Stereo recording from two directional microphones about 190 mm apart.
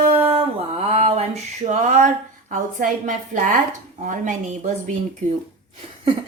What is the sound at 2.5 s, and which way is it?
A woman's voice, 45° right (ahead or behind).